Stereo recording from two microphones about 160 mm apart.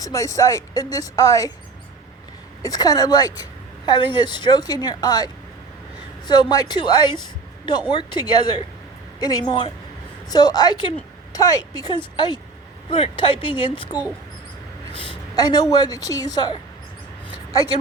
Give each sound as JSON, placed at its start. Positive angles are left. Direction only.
{"t": 0.0, "sound": "a woman's voice", "side_deg": 20}
{"t": 2.6, "sound": "a woman's voice", "side_deg": 25}